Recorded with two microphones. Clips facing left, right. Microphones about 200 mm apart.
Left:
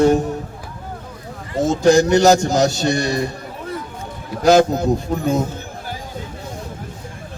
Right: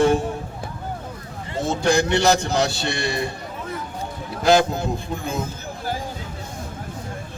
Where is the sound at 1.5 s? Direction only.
40° left (ahead or behind).